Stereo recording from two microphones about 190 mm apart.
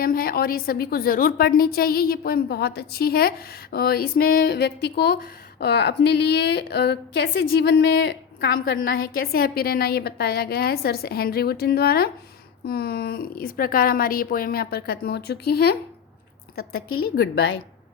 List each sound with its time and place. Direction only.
0.0 s a woman's voice: 50° left (ahead or behind)